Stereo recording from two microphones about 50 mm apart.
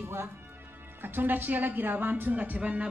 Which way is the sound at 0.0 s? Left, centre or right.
Right.